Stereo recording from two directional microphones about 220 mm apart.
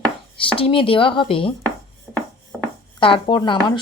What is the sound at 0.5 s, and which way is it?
A woman's voice, 25° left (ahead or behind).